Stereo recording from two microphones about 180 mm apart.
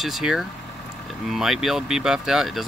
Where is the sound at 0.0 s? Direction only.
Centre (ahead or behind).